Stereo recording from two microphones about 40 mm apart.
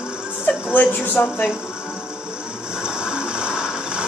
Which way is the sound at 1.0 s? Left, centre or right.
Left.